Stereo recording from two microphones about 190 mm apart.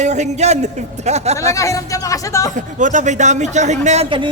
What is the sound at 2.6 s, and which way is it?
A man's voice, 40° right (ahead or behind).